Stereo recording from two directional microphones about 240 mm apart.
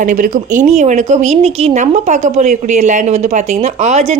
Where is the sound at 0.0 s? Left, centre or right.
Right.